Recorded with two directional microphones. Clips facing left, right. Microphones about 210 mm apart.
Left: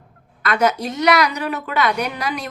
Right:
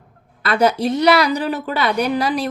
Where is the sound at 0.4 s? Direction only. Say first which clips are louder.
Right 3 dB; 30° right (ahead or behind).